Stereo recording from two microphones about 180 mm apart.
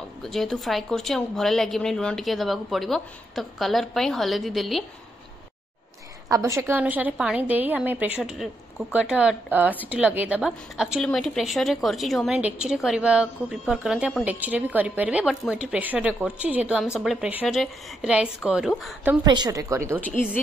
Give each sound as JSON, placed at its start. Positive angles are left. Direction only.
{"t": 0.2, "sound": "a woman's voice", "side_deg": 0}
{"t": 6.3, "sound": "a woman's voice", "side_deg": -15}
{"t": 19.2, "sound": "a woman's voice", "side_deg": -25}
{"t": 20.0, "sound": "speech", "side_deg": 10}